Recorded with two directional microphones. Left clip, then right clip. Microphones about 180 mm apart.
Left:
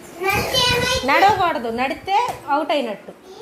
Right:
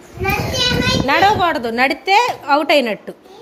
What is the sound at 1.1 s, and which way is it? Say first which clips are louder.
Speech: right 2 dB; 25° right (ahead or behind).